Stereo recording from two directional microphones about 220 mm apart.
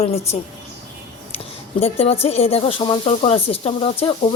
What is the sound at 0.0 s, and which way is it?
Speech, 30° left (ahead or behind).